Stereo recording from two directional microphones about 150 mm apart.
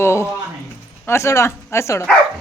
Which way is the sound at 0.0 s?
15° left (ahead or behind).